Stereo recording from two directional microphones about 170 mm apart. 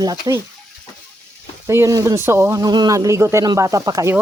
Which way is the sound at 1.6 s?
15° right (ahead or behind).